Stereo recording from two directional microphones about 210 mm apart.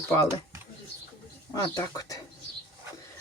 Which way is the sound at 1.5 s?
20° left (ahead or behind).